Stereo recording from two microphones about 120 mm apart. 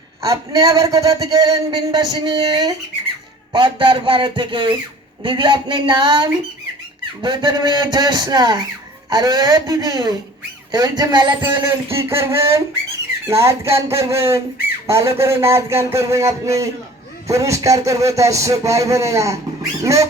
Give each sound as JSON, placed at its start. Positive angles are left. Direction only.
{"t": 0.2, "sound": "a man's voice", "side_deg": -25}
{"t": 11.6, "sound": "a man's voice", "side_deg": -20}